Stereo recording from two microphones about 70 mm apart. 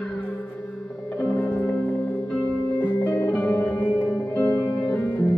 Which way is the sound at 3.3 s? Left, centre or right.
Centre.